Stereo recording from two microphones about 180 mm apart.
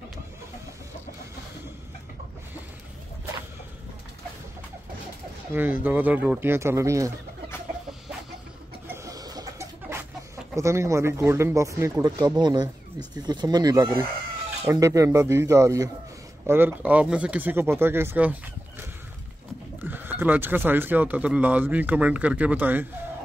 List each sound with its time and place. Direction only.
5.5 s speech: 10° right (ahead or behind)
8.8 s chicken: 15° right (ahead or behind)
10.5 s speech: 15° right (ahead or behind)
19.8 s speech: 10° right (ahead or behind)